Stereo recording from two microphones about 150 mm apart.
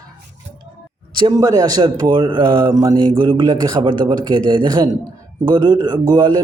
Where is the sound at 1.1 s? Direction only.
25° right (ahead or behind).